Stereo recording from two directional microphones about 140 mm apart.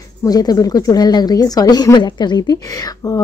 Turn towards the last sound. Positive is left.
turn(degrees=25)  # may be behind; listen again after turning